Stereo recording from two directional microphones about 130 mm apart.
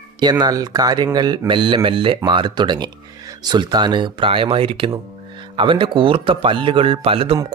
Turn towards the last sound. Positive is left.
turn(degrees=-45)  # may be behind; listen again after turning